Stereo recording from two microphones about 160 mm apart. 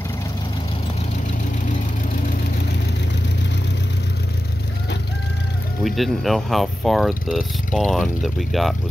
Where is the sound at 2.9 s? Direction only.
90° left.